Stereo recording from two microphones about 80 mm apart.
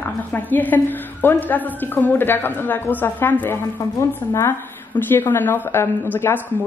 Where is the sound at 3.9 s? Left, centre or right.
Left.